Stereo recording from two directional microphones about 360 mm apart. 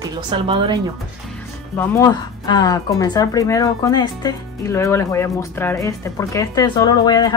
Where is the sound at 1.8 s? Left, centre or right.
Centre.